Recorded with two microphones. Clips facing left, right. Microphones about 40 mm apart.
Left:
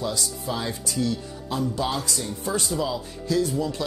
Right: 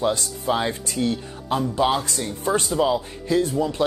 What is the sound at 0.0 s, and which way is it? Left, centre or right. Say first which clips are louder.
Speech: right 6 dB; right.